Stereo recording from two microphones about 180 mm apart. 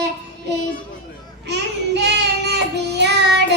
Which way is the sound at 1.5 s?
70° right (ahead or behind).